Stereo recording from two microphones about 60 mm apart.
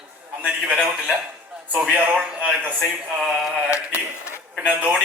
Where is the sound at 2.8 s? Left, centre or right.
Centre.